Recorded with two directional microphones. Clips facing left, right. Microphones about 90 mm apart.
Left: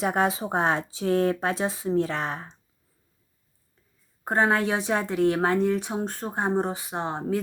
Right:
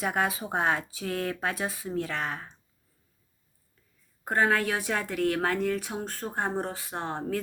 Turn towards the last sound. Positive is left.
turn(degrees=15)  # may be behind; listen again after turning